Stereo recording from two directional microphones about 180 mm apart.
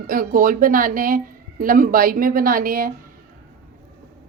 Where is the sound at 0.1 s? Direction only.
50° right (ahead or behind).